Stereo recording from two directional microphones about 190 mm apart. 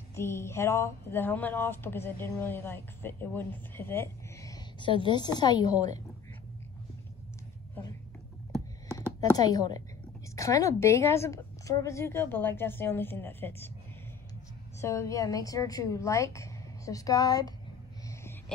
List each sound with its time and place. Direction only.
0.1 s speech: 15° left (ahead or behind)
9.3 s a woman's voice: 20° left (ahead or behind)
14.8 s speech: 15° left (ahead or behind)